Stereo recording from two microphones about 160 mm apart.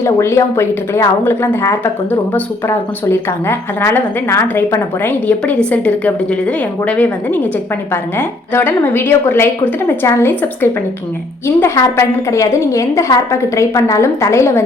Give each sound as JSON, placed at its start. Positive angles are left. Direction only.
{"t": 0.0, "sound": "a woman's voice", "side_deg": 15}
{"t": 8.5, "sound": "a woman's voice", "side_deg": 15}